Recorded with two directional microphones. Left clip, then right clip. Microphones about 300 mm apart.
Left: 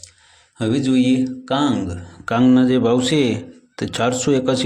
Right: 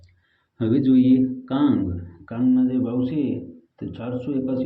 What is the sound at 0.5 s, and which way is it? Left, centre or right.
A man's voice, left.